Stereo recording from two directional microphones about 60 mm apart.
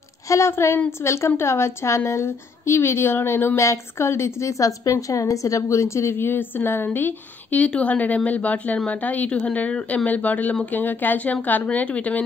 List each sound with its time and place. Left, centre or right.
0.3 s a woman's voice: left
6.1 s a woman's voice: left
7.6 s speech: left